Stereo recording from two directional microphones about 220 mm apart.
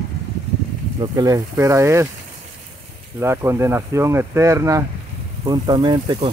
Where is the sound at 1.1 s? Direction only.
15° right (ahead or behind).